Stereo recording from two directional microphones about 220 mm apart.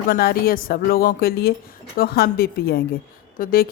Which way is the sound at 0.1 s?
45° left (ahead or behind).